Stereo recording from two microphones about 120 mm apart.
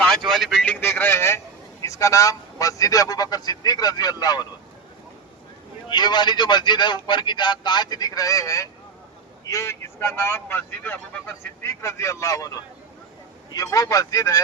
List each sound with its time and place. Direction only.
0.0 s vehicle: 5° left (ahead or behind)
0.6 s a sound: 15° left (ahead or behind)
1.8 s speech: 25° left (ahead or behind)
5.9 s speech: 35° left (ahead or behind); by 11.7 s 10° left (ahead or behind)
11.8 s speech: 25° left (ahead or behind)
13.5 s speech: 30° left (ahead or behind)